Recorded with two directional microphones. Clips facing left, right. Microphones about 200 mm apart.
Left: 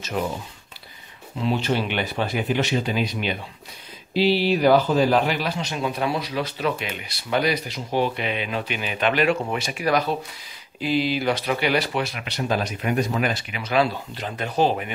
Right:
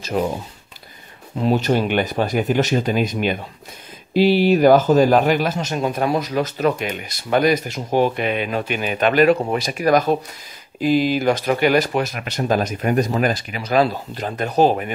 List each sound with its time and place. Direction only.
0.2 s speech: 40° right (ahead or behind)
1.4 s speech: 45° right (ahead or behind)